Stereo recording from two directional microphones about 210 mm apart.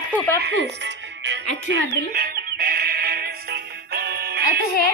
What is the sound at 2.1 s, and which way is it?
Music, 45° right (ahead or behind).